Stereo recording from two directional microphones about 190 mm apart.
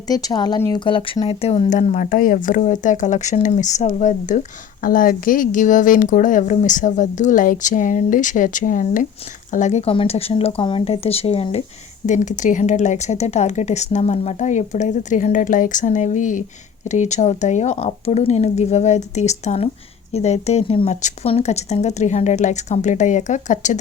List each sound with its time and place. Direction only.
0.1 s speech: 20° left (ahead or behind); by 23.7 s 40° left (ahead or behind)